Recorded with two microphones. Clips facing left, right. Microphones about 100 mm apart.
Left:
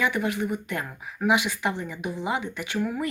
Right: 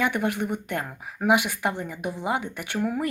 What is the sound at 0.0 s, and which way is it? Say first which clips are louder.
Speech: right 1 dB; 55° right (ahead or behind).